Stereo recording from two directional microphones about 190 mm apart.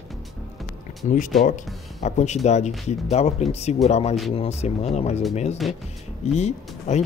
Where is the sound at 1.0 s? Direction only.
40° left (ahead or behind).